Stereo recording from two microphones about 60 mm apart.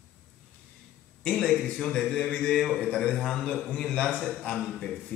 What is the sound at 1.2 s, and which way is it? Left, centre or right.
Speech, centre.